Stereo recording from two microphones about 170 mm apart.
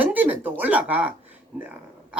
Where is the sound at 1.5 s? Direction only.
10° right (ahead or behind).